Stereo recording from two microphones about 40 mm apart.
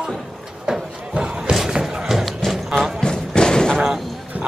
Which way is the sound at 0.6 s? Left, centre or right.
Centre.